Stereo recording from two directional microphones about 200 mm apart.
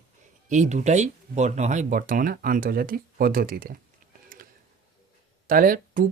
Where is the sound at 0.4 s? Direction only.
35° right (ahead or behind).